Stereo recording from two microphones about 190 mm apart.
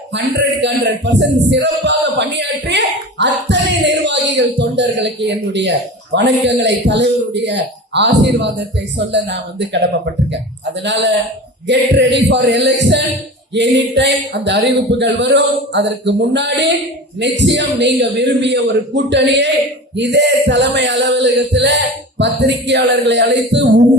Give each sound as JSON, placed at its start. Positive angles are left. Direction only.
{"t": 0.1, "sound": "speech", "side_deg": -65}
{"t": 10.8, "sound": "speech", "side_deg": -65}